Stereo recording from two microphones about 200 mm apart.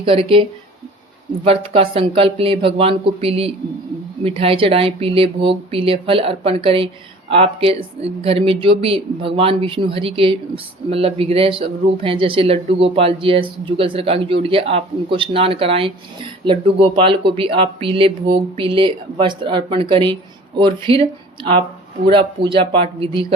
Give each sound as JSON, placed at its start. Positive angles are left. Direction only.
{"t": 0.0, "sound": "speech", "side_deg": -25}
{"t": 1.5, "sound": "speech", "side_deg": -30}